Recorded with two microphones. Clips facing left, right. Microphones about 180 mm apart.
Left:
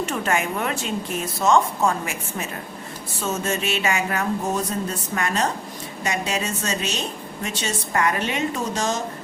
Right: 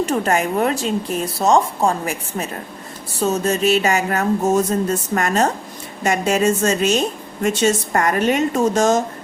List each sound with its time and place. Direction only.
0.0 s speech: 35° right (ahead or behind)